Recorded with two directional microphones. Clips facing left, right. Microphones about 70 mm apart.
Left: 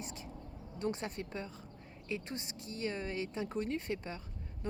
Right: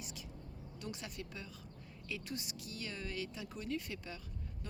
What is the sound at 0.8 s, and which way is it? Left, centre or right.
Speech, left.